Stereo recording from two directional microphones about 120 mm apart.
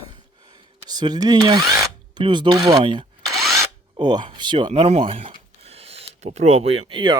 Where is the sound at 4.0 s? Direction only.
40° right (ahead or behind); by 7.0 s 55° right (ahead or behind).